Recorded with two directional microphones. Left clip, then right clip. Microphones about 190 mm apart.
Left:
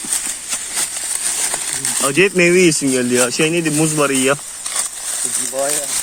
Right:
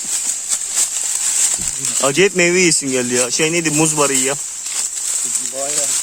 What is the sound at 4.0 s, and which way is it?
Speech, 15° right (ahead or behind).